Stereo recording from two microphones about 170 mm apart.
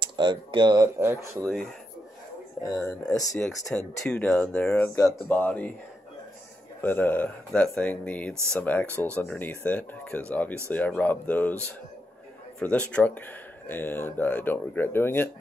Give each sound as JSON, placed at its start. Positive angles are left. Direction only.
{"t": 0.0, "sound": "speech", "side_deg": -25}
{"t": 0.9, "sound": "speech", "side_deg": -15}
{"t": 3.7, "sound": "speech", "side_deg": 5}
{"t": 6.8, "sound": "speech", "side_deg": 10}